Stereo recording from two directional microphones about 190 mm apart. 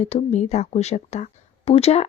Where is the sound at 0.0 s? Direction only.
30° left (ahead or behind).